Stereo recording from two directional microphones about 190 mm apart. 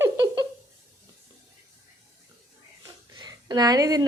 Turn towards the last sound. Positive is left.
turn(degrees=-20)  # may be behind; listen again after turning